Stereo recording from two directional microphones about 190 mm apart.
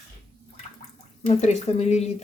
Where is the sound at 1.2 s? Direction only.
35° left (ahead or behind).